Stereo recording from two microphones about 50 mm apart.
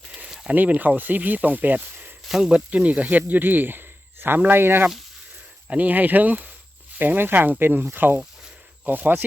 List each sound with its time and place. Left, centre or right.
0.3 s a sound: centre
0.5 s speech: right
2.2 s speech: centre
2.5 s speech: right
5.6 s speech: right